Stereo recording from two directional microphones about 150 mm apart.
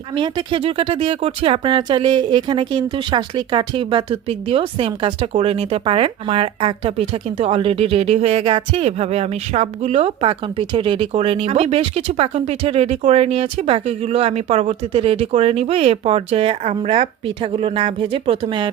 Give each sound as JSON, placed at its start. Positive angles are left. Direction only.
{"t": 0.1, "sound": "speech", "side_deg": -35}